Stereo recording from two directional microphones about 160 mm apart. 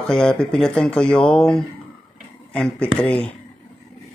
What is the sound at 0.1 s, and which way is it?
Speech, 5° left (ahead or behind).